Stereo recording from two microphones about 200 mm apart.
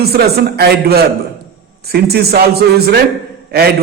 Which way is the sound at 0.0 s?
50° right (ahead or behind).